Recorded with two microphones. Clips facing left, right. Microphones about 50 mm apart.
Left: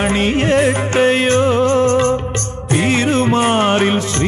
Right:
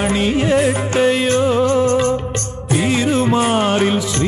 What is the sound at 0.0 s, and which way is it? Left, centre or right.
Music, left.